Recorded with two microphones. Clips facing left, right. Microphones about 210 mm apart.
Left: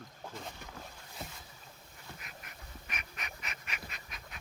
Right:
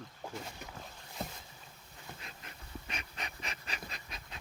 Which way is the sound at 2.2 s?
30° right (ahead or behind).